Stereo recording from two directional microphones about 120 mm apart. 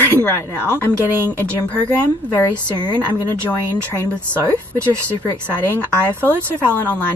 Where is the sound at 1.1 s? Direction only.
20° right (ahead or behind).